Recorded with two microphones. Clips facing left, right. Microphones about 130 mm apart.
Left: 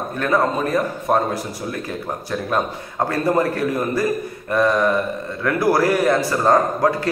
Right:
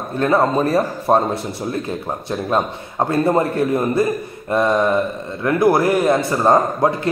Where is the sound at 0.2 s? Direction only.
25° right (ahead or behind).